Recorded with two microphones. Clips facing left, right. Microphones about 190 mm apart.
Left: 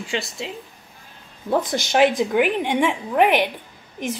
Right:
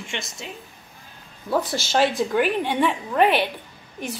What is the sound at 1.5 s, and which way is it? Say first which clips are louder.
A woman's voice: left 2 dB; 15° left (ahead or behind).